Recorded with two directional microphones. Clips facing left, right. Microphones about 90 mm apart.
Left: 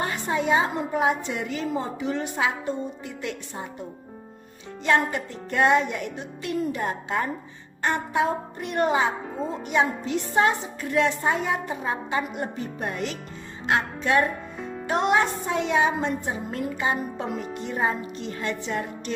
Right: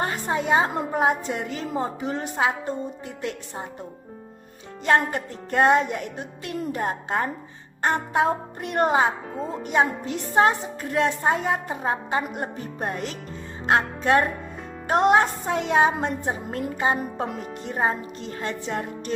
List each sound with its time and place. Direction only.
0.0 s a woman's voice: 40° right (ahead or behind)
4.8 s a woman's voice: 45° right (ahead or behind)